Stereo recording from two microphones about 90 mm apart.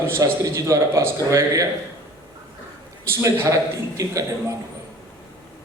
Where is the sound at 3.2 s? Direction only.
30° right (ahead or behind).